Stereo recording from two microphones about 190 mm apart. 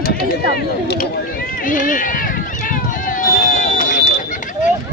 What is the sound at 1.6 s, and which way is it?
Run, 45° left (ahead or behind).